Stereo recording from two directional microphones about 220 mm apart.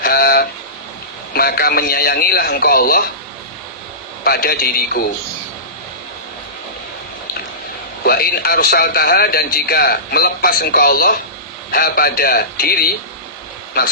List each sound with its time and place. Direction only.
0.0 s a sound: 45° left (ahead or behind)
1.3 s a man's voice: 45° left (ahead or behind)
4.2 s a man's voice: 45° left (ahead or behind)
8.0 s a man's voice: 45° left (ahead or behind)